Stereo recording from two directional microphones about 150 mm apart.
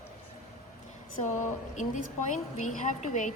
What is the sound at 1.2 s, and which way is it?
A woman's voice, 55° left (ahead or behind).